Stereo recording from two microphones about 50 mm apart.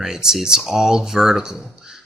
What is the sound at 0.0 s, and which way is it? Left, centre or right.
Speech, centre.